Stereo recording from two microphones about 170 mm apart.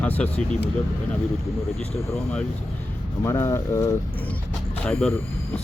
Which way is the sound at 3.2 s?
15° left (ahead or behind).